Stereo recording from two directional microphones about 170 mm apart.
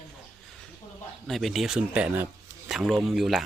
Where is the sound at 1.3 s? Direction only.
Centre (ahead or behind).